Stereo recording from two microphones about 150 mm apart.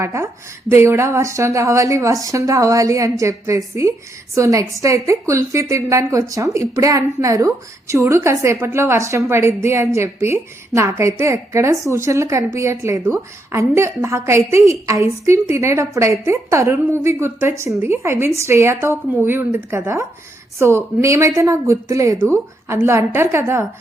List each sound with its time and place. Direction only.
0.0 s a woman's voice: 20° right (ahead or behind)